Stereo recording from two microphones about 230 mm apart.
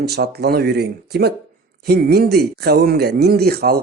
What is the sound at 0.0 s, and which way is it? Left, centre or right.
Speech, right.